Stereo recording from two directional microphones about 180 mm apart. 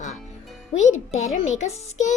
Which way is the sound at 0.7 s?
40° left (ahead or behind).